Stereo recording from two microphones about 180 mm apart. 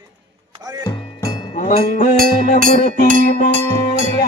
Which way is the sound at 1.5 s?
45° left (ahead or behind).